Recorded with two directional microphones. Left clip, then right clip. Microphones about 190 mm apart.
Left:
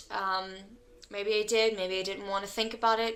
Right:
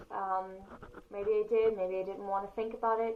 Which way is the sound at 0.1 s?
35° left (ahead or behind).